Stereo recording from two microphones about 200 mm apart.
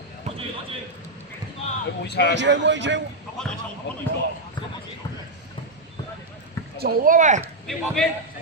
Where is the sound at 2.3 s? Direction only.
65° right (ahead or behind).